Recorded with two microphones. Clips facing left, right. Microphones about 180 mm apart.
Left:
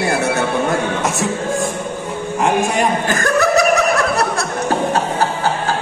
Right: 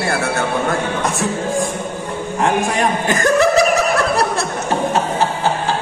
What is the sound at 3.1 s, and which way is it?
Speech, 20° right (ahead or behind).